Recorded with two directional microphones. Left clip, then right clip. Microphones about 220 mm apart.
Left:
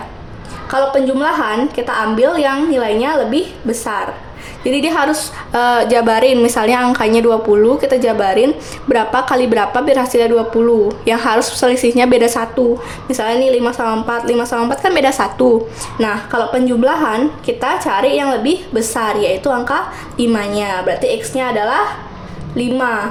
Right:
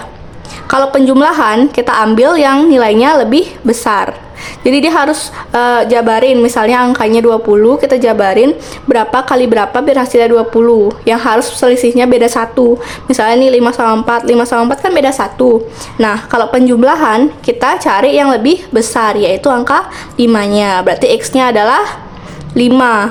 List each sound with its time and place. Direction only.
0.7 s a woman's voice: 30° right (ahead or behind)